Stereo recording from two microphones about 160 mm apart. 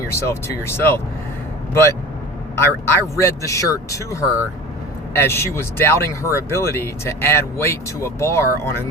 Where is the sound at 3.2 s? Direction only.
20° left (ahead or behind).